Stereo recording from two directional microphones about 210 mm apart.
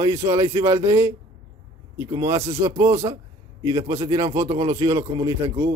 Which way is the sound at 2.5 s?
15° right (ahead or behind).